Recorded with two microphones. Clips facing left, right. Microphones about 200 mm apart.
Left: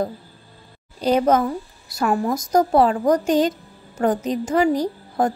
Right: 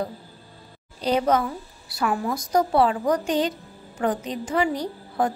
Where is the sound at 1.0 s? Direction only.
45° left (ahead or behind).